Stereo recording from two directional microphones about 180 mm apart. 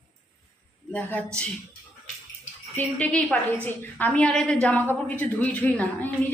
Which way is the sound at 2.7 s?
5° left (ahead or behind).